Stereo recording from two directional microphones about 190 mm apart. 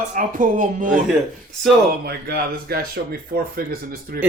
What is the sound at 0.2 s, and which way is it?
Speech, 45° right (ahead or behind).